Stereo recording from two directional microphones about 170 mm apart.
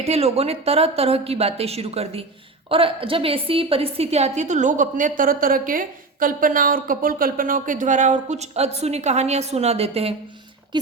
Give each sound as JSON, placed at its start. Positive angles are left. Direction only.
{"t": 0.0, "sound": "a woman's voice", "side_deg": -35}